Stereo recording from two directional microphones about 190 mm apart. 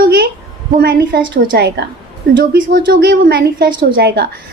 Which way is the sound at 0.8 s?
55° right (ahead or behind).